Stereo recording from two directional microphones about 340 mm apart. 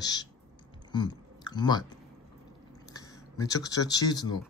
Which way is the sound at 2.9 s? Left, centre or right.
Centre.